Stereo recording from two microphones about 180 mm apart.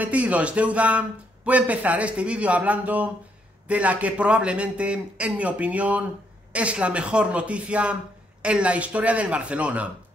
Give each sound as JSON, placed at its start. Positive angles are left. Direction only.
{"t": 0.0, "sound": "a man's voice", "side_deg": -10}